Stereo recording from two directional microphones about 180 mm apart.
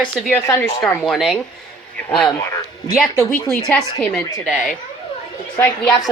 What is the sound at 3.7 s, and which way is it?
Speech, 5° left (ahead or behind).